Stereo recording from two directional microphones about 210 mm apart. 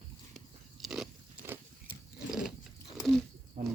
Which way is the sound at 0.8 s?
Centre (ahead or behind).